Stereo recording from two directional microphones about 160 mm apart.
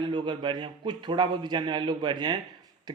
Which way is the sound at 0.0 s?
30° right (ahead or behind).